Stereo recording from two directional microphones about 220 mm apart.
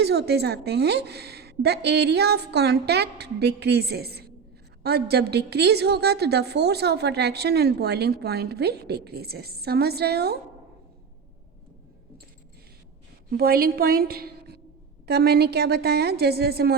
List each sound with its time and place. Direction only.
0.0 s a woman's voice: 45° right (ahead or behind)
13.3 s a woman's voice: 45° right (ahead or behind)